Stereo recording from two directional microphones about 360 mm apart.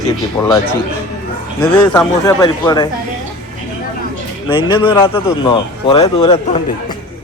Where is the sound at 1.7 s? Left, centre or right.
Centre.